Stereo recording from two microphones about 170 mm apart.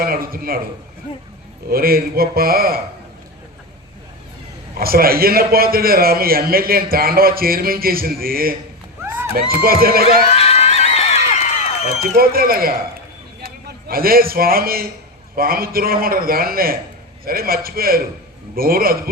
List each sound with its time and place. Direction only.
0.0 s a man's voice: 60° right (ahead or behind)
1.7 s a man's voice: 60° right (ahead or behind)
4.8 s a man's voice: 60° right (ahead or behind)
10.3 s a sound: 35° left (ahead or behind)
12.1 s a man's voice: 60° right (ahead or behind)